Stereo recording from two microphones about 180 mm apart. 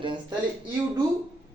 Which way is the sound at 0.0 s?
25° right (ahead or behind).